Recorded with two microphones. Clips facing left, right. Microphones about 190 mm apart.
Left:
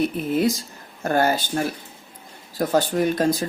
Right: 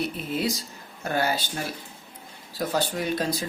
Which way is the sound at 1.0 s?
50° left (ahead or behind).